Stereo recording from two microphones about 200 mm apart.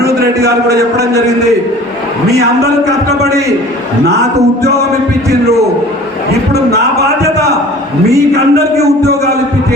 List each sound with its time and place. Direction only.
8.4 s speech: 55° right (ahead or behind)